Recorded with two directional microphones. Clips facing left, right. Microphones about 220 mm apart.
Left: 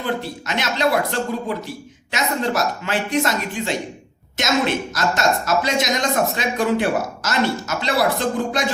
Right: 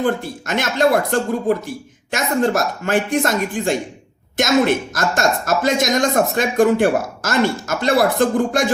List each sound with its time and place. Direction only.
0.0 s speech: 50° right (ahead or behind)